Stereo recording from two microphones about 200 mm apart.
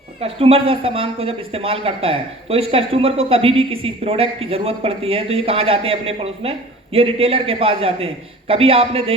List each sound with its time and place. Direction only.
0.2 s speech: 30° right (ahead or behind)